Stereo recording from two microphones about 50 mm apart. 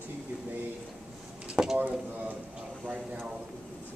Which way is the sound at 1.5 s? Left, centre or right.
Centre.